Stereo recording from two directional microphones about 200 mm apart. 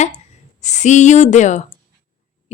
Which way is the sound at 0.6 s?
35° left (ahead or behind).